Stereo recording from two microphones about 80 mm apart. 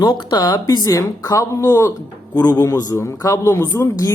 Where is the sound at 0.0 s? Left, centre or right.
Left.